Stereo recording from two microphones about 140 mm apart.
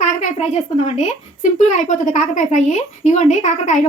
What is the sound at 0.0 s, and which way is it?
A woman's voice, 60° left (ahead or behind).